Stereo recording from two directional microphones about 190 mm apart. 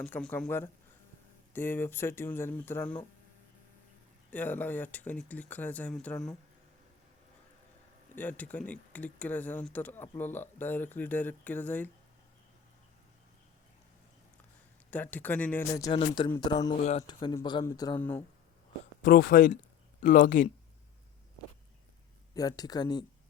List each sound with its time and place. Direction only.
0.0 s speech: 10° left (ahead or behind)
4.3 s speech: 10° left (ahead or behind)
8.1 s speech: 10° left (ahead or behind)
14.8 s speech: 10° left (ahead or behind)
15.9 s speech: 25° left (ahead or behind)
19.0 s speech: 45° left (ahead or behind)
22.4 s speech: 20° left (ahead or behind)